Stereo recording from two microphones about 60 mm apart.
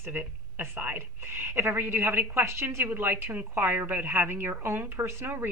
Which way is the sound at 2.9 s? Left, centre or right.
Right.